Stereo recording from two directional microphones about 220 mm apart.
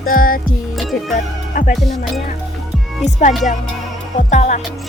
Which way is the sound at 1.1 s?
35° left (ahead or behind).